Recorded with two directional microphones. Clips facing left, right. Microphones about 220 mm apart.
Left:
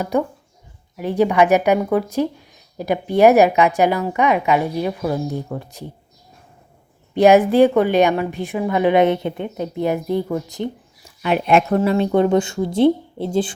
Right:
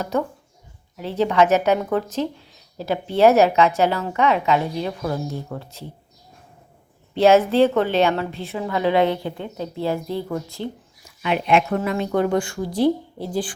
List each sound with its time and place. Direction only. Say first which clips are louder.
0.0 s speech: left 3 dB; 15° left (ahead or behind)
7.1 s speech: left 3 dB; 15° left (ahead or behind)
11.2 s speech: left 3 dB; 45° left (ahead or behind)
11.8 s speech: left 5 dB; 30° left (ahead or behind)